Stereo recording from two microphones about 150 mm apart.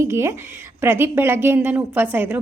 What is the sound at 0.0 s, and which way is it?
A woman's voice, 20° right (ahead or behind).